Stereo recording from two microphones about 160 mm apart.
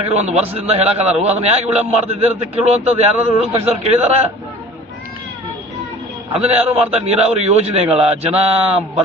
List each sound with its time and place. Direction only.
0.0 s a man's voice: 40° right (ahead or behind)
6.3 s a man's voice: 40° right (ahead or behind)